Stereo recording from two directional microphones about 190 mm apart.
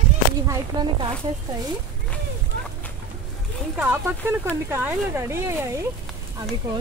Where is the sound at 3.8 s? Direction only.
10° right (ahead or behind).